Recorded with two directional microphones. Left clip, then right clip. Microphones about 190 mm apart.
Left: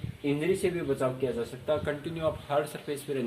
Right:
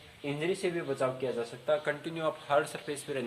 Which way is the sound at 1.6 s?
30° right (ahead or behind).